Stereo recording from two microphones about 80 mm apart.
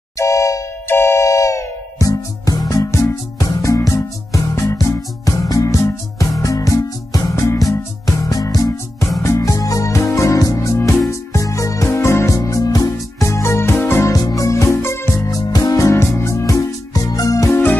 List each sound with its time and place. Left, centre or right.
0.2 s music: left
14.1 s music: left
15.3 s music: left